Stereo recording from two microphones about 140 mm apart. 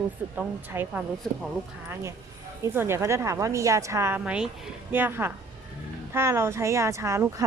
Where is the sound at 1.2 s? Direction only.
5° left (ahead or behind).